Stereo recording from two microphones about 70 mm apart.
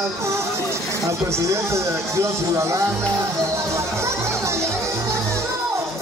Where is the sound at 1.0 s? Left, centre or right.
Right.